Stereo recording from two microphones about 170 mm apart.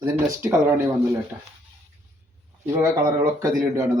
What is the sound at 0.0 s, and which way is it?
Speech, 15° right (ahead or behind).